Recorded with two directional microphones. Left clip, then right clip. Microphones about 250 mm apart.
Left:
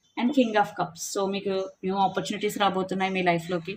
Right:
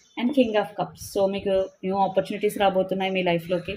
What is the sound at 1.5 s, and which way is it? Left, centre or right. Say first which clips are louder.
Speech: right 5 dB; centre.